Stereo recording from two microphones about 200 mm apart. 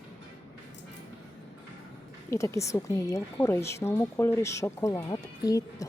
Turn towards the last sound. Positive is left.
turn(degrees=15)  # may be behind; listen again after turning